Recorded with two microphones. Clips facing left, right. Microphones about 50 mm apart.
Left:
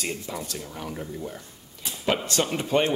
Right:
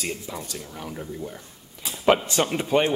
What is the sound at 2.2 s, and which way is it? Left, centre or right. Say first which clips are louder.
Speech: right 2 dB; centre.